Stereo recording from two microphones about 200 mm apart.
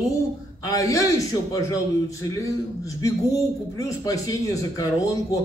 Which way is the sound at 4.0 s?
15° left (ahead or behind).